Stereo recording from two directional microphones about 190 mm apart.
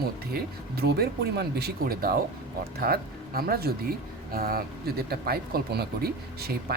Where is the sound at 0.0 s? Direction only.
55° right (ahead or behind).